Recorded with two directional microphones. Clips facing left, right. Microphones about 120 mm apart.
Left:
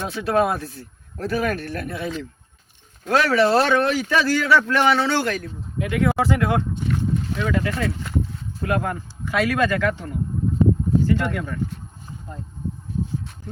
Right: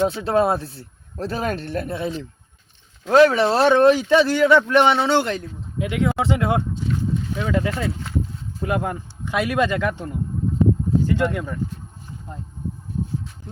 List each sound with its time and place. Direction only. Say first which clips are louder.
0.1 s speech: right 1 dB; 25° right (ahead or behind)
6.7 s a sound: even; 60° left (ahead or behind)
7.3 s speech: right 2 dB; 20° right (ahead or behind)